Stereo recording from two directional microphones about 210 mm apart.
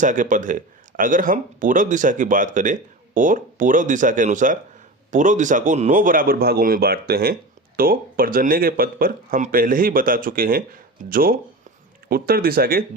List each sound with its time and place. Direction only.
0.0 s speech: 40° right (ahead or behind)